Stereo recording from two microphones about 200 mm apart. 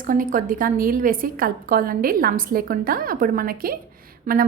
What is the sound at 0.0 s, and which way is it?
A woman's voice, 40° right (ahead or behind).